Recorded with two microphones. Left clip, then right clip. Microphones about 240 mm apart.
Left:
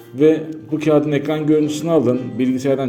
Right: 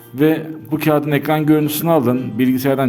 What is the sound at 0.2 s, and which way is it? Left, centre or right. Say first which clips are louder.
A man's voice: left 2 dB; right.